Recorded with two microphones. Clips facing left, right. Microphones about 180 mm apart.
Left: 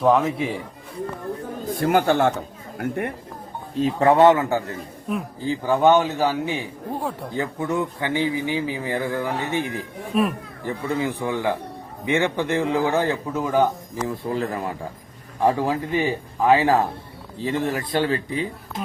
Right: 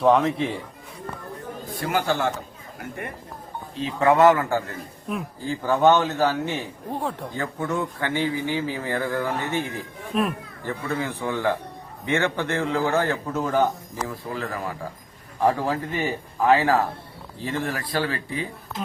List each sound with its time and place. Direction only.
0.0 s a man's voice: centre (ahead or behind)
1.7 s speech: 50° left (ahead or behind)
3.8 s speech: 45° left (ahead or behind)
4.1 s a man's voice: 25° left (ahead or behind)
10.1 s a man's voice: 5° left (ahead or behind)
10.7 s a man's voice: 15° left (ahead or behind)
14.3 s speech: 25° left (ahead or behind)
15.4 s a man's voice: 15° left (ahead or behind)